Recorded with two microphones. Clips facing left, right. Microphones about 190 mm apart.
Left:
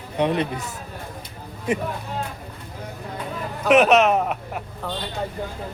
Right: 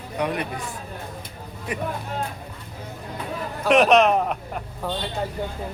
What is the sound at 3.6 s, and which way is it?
Speech, 5° left (ahead or behind).